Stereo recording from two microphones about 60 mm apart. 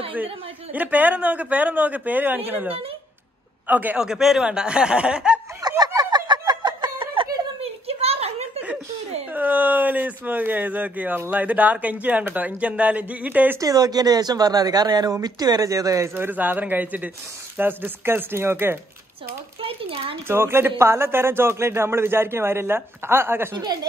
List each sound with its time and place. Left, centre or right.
0.7 s speech: right
4.0 s speech: centre
5.6 s a sound: right
7.4 s a sound: right
9.3 s speech: right
13.6 s speech: right
16.2 s a man's voice: right
20.2 s a man's voice: right